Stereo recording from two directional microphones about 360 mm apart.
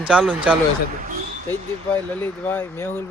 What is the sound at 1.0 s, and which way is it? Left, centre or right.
Speech, right.